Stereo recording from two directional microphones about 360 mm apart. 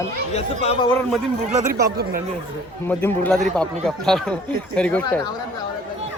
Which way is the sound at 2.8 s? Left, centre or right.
Centre.